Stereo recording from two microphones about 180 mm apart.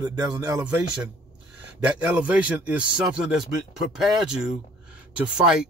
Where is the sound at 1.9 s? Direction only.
5° right (ahead or behind).